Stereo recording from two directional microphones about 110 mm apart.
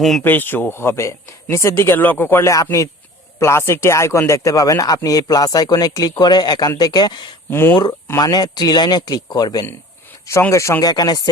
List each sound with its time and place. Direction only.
0.0 s speech: centre (ahead or behind)
0.3 s speech: 15° left (ahead or behind); by 7.3 s 40° left (ahead or behind)
7.5 s speech: 20° left (ahead or behind)
8.0 s speech: 35° left (ahead or behind)
10.5 s speech: 25° left (ahead or behind)